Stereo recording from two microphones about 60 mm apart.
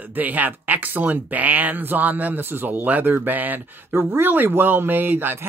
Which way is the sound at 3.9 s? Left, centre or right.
Right.